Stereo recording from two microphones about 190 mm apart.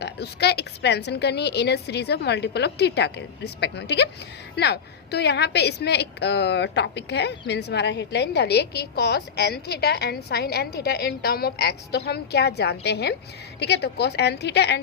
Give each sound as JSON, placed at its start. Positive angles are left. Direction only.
{"t": 0.0, "sound": "a woman's voice", "side_deg": 60}